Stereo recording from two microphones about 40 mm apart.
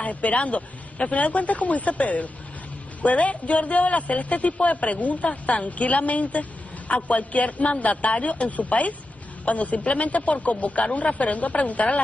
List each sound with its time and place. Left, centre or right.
0.0 s a man's voice: left